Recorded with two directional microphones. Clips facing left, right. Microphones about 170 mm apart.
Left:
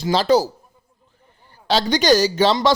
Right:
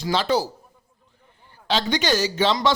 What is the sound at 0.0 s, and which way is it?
Speech, 35° left (ahead or behind).